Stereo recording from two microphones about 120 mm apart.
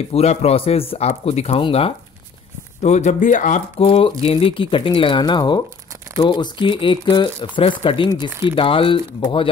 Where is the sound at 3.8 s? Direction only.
50° left (ahead or behind).